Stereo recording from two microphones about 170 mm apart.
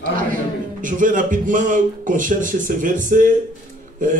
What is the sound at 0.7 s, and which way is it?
A man's voice, 50° right (ahead or behind).